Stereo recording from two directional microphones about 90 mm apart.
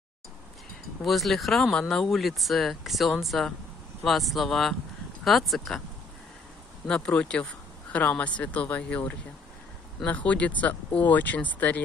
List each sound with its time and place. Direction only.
1.0 s speech: centre (ahead or behind)
6.9 s speech: 10° left (ahead or behind)